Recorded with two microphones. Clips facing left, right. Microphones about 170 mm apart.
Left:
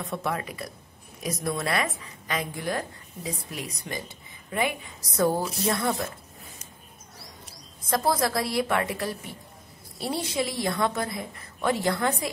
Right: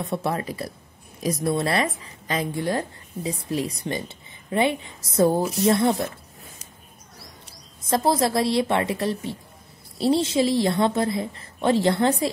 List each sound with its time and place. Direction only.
0.0 s a woman's voice: 30° right (ahead or behind)
7.8 s a woman's voice: 25° right (ahead or behind)